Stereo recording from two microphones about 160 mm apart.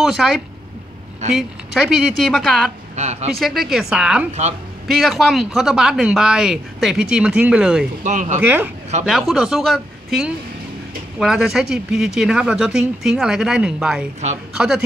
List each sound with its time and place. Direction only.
0.0 s speech: centre (ahead or behind)
3.0 s speech: 45° right (ahead or behind)
3.3 s speech: centre (ahead or behind)
4.3 s speech: 45° right (ahead or behind)
4.8 s speech: centre (ahead or behind)
8.0 s speech: 50° right (ahead or behind)
8.4 s speech: 10° right (ahead or behind)